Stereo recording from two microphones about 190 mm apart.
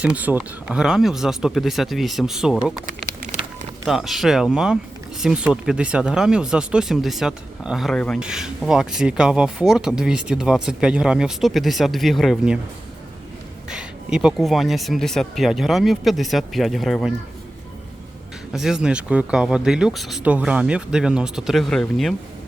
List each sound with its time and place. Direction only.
0.0 s speech: 5° right (ahead or behind)
3.8 s speech: centre (ahead or behind)
13.7 s speech: 5° right (ahead or behind)
18.5 s speech: centre (ahead or behind)